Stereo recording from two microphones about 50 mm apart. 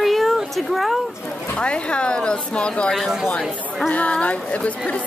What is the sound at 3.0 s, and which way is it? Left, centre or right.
Speech, centre.